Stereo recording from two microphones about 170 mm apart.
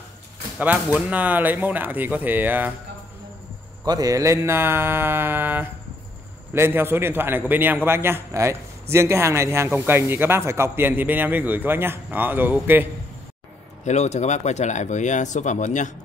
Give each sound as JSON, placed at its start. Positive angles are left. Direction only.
{"t": 0.9, "sound": "a man's voice", "side_deg": -10}
{"t": 3.8, "sound": "a man's voice", "side_deg": -20}
{"t": 13.8, "sound": "speech", "side_deg": 40}